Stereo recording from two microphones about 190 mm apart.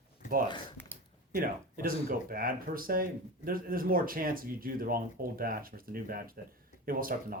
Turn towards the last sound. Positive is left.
turn(degrees=-50)  # may be behind; listen again after turning